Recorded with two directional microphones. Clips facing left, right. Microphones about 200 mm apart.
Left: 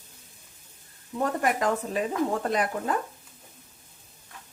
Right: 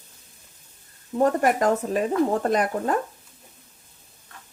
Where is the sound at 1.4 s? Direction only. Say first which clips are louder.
Right 5 dB; 45° right (ahead or behind).